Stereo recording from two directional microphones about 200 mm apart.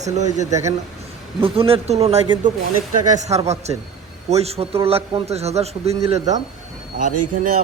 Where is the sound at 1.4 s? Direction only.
25° right (ahead or behind).